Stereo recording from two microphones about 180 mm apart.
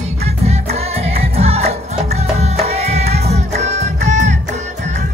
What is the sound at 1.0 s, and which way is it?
Music, 35° right (ahead or behind).